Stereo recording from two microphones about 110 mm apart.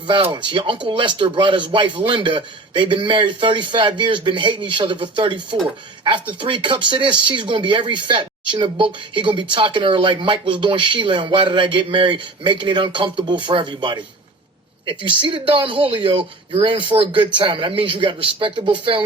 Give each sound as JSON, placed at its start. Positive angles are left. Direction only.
{"t": 0.1, "sound": "speech", "side_deg": -50}